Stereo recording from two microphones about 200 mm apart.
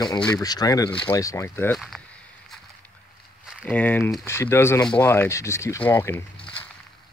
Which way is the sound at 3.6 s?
10° left (ahead or behind).